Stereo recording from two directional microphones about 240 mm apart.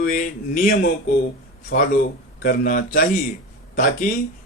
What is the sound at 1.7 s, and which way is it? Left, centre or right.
Speech, left.